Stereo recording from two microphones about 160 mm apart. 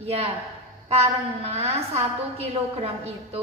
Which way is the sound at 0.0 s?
40° right (ahead or behind).